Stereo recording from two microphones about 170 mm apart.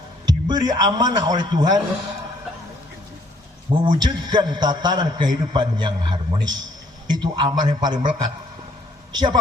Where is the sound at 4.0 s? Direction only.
25° right (ahead or behind).